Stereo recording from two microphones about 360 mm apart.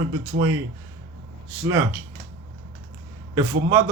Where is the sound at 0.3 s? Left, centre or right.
Centre.